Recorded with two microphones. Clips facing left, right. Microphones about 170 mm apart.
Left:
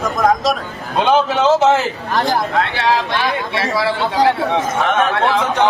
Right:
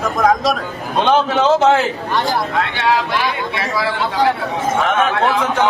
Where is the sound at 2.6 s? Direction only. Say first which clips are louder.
Even; 35° left (ahead or behind).